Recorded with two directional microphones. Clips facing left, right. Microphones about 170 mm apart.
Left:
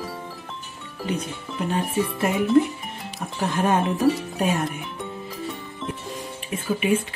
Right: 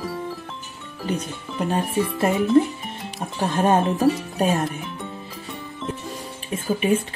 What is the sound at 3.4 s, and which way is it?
Speech, 30° right (ahead or behind).